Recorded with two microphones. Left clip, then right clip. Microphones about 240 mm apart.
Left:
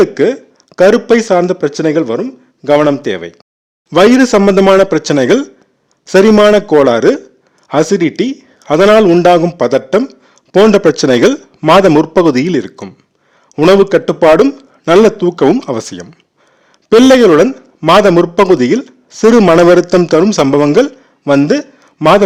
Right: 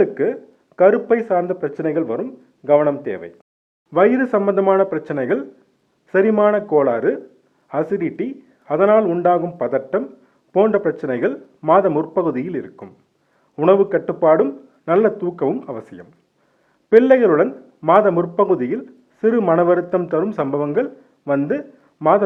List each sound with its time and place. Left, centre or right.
0.0 s a man's voice: left